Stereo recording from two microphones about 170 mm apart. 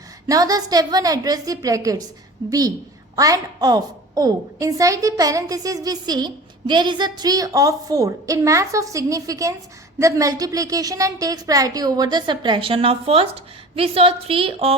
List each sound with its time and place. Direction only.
0.3 s a woman's voice: 20° right (ahead or behind)